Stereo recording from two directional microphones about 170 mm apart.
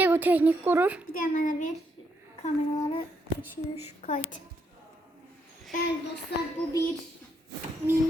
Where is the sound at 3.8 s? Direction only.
50° left (ahead or behind).